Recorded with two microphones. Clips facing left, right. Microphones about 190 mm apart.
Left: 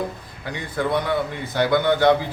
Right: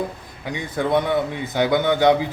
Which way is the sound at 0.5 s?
20° right (ahead or behind).